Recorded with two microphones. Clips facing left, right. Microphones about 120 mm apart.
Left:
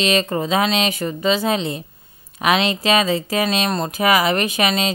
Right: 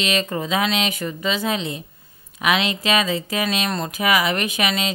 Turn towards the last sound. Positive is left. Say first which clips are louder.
# left 3 dB
turn(degrees=35)  # may be behind; listen again after turning